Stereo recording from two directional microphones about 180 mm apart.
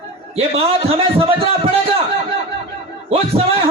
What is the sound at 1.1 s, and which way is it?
Speech, 30° right (ahead or behind).